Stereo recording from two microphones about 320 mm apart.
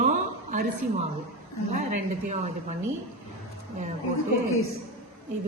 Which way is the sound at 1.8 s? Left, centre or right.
Right.